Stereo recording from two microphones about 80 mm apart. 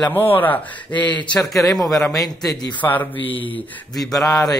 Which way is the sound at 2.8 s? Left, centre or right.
Left.